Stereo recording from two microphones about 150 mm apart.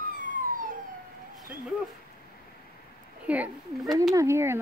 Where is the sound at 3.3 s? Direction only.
10° right (ahead or behind).